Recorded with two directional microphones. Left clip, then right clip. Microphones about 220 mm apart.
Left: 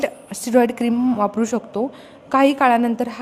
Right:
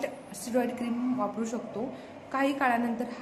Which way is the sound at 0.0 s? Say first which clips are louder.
Left 11 dB; 50° left (ahead or behind).